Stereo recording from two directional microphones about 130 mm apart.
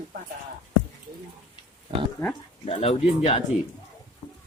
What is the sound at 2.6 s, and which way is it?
Speech, 50° left (ahead or behind).